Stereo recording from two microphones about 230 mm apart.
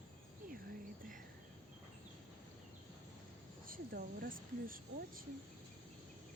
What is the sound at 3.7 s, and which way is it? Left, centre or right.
Speech, right.